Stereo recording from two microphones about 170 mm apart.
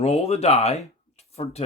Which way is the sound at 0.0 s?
40° left (ahead or behind).